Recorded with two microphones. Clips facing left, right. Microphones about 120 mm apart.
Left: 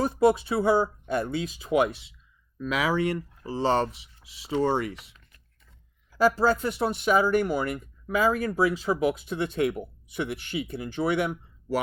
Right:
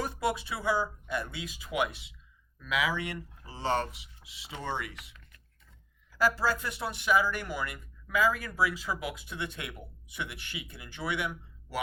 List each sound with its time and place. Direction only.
0.0 s speech: 30° left (ahead or behind)
7.5 s speech: 40° left (ahead or behind)
8.1 s speech: 25° left (ahead or behind)